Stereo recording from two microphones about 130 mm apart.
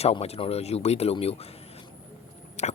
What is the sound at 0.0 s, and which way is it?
Speech, 55° left (ahead or behind).